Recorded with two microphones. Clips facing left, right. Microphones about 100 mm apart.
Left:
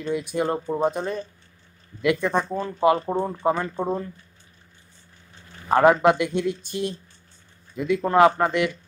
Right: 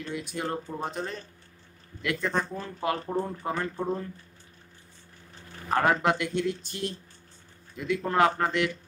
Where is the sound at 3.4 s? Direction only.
90° left.